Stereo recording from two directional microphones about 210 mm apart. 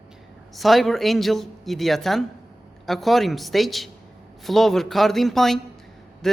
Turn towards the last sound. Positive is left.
turn(degrees=0)  # may be behind; listen again after turning